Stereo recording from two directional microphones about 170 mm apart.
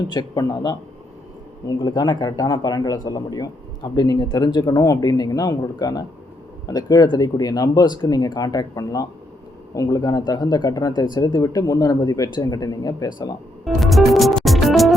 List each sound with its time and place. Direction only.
0.1 s speech: 25° left (ahead or behind)
13.7 s music: centre (ahead or behind)